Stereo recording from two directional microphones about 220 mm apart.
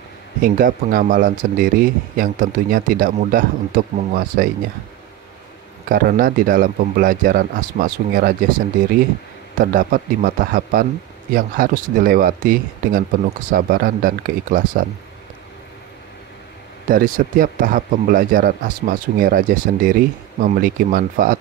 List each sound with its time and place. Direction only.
0.4 s speech: 40° right (ahead or behind)
5.9 s speech: 40° right (ahead or behind)
9.6 s speech: 40° right (ahead or behind)
16.9 s speech: 40° right (ahead or behind)